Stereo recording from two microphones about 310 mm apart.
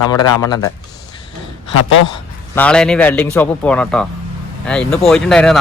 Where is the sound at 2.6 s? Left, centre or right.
Centre.